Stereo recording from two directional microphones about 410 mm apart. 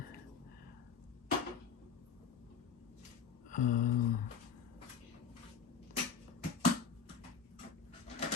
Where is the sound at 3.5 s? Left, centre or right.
Centre.